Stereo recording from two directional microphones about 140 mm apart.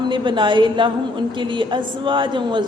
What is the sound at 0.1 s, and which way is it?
A woman's voice, 35° right (ahead or behind).